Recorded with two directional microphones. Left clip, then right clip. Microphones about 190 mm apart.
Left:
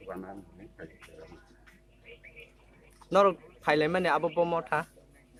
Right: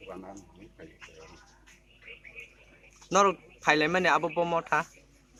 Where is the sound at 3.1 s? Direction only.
25° right (ahead or behind).